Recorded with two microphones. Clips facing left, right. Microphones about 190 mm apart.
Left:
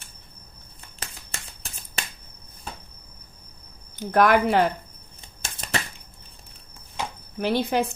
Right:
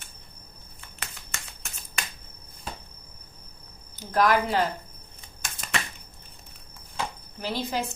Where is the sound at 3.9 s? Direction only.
60° left (ahead or behind).